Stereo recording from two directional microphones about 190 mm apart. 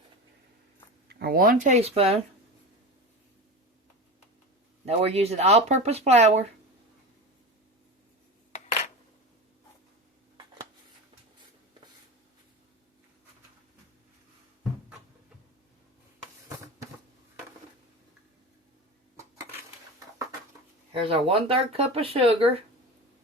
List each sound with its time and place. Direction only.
1.0 s speech: 55° right (ahead or behind); by 2.1 s 30° right (ahead or behind)
4.9 s speech: 35° right (ahead or behind)
20.9 s speech: 30° right (ahead or behind)